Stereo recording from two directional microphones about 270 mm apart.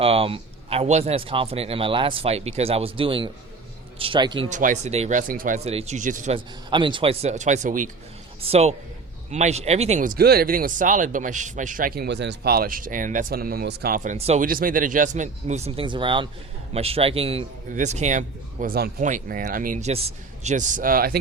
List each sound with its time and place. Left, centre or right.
0.0 s speech: right